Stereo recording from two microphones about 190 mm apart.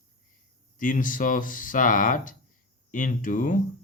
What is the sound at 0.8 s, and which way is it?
Speech, 45° left (ahead or behind).